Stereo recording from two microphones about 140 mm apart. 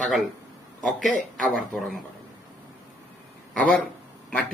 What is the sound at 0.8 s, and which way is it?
Speech, centre (ahead or behind).